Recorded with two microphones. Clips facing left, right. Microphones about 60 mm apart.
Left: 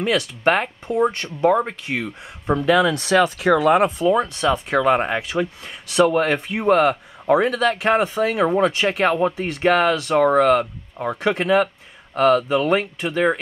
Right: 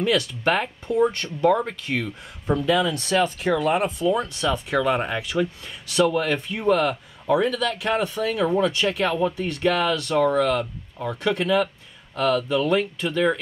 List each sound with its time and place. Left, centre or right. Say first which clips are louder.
0.4 s speech: left 4 dB; left
0.8 s speech: right 1 dB; left
2.6 s speech: left 6 dB; left
4.1 s speech: left 4 dB; left